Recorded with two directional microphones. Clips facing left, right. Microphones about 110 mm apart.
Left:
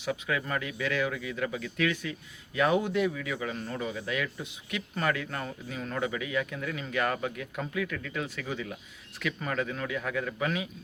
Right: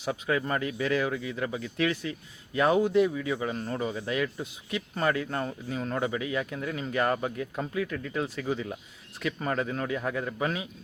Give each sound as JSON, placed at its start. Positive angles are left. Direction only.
{"t": 0.0, "sound": "a man's voice", "side_deg": -30}